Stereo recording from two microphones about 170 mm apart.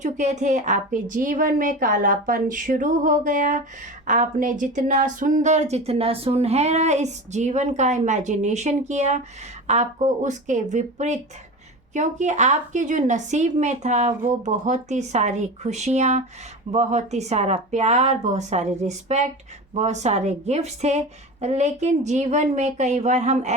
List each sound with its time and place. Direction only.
0.0 s speech: 45° right (ahead or behind)